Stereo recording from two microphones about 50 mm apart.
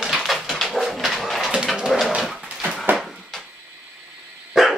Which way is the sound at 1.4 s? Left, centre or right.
Centre.